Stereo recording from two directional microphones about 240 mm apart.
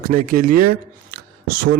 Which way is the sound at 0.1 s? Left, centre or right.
Right.